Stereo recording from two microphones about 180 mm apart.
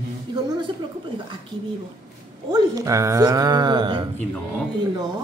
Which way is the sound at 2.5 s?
20° right (ahead or behind).